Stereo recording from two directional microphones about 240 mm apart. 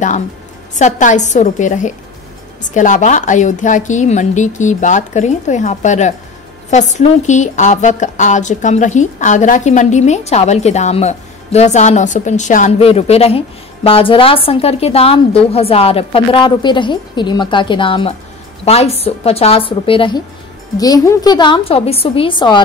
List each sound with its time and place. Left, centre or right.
0.7 s a woman's voice: left